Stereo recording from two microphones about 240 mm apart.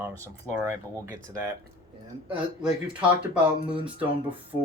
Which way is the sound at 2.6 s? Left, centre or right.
Centre.